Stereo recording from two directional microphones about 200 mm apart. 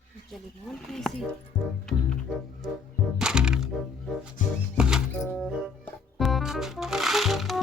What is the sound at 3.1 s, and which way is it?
Music, 5° right (ahead or behind).